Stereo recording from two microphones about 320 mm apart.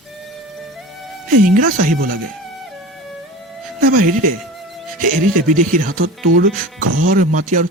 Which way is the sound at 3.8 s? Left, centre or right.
Right.